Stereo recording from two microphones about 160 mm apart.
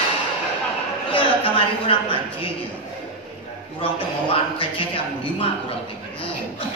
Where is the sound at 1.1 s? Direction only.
35° left (ahead or behind).